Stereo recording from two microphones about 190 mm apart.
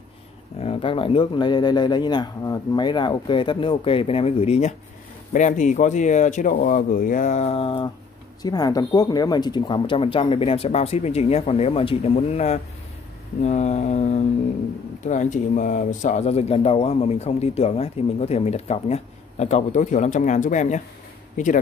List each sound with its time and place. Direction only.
0.6 s speech: 30° left (ahead or behind)